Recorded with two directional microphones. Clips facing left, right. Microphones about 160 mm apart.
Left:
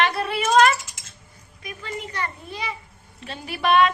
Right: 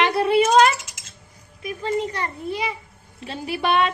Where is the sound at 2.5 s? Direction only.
25° right (ahead or behind).